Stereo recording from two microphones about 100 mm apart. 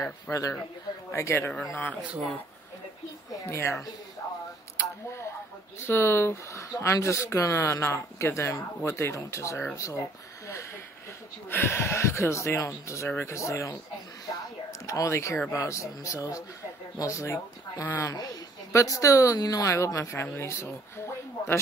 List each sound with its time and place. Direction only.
0.3 s speech: 35° left (ahead or behind); by 2.0 s 20° left (ahead or behind)
3.3 s a woman's voice: 30° left (ahead or behind)
5.8 s speech: 25° left (ahead or behind)
9.8 s a sound: 30° left (ahead or behind)
11.4 s speech: 25° left (ahead or behind)
14.2 s a sound: 40° left (ahead or behind)
15.5 s speech: 30° left (ahead or behind)
18.0 s speech: 40° left (ahead or behind)